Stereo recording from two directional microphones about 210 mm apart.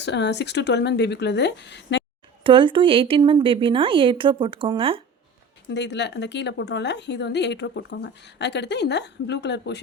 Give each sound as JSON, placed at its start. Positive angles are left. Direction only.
{"t": 0.0, "sound": "speech", "side_deg": 55}
{"t": 2.4, "sound": "speech", "side_deg": -25}
{"t": 5.7, "sound": "a woman's voice", "side_deg": 55}